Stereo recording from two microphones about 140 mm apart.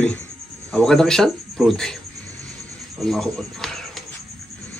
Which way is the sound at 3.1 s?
5° left (ahead or behind).